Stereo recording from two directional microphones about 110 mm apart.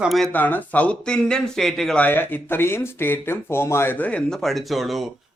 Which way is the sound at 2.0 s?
20° left (ahead or behind).